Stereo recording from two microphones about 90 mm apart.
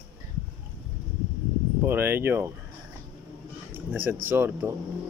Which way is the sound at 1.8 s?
25° right (ahead or behind).